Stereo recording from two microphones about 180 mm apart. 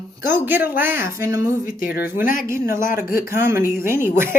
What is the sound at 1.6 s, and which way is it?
Speech, 50° left (ahead or behind).